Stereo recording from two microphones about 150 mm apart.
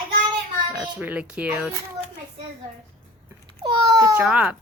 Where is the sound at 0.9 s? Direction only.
10° right (ahead or behind).